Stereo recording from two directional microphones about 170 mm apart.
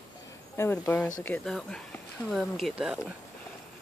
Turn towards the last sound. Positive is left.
turn(degrees=-5)  # may be behind; listen again after turning